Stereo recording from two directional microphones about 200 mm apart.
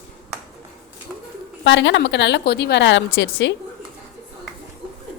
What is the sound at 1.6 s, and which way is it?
A woman's voice, 65° left (ahead or behind).